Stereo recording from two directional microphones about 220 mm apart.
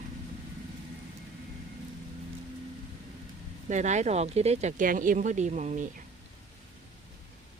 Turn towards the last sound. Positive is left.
turn(degrees=-35)  # may be behind; listen again after turning